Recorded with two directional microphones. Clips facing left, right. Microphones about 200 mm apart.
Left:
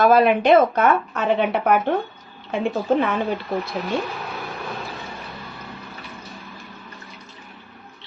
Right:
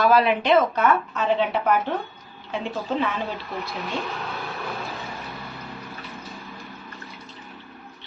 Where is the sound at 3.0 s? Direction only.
55° left (ahead or behind).